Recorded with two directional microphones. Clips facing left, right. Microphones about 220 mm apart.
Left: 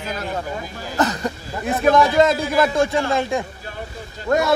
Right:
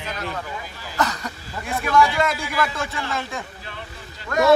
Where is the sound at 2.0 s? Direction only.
45° left (ahead or behind).